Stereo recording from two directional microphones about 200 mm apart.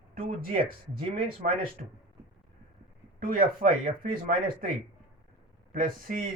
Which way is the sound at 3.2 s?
45° right (ahead or behind).